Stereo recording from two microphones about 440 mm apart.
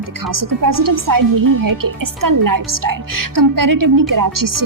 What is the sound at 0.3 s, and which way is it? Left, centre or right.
Speech, right.